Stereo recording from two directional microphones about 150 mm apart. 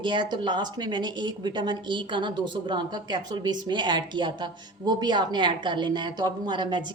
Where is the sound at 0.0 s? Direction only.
30° right (ahead or behind).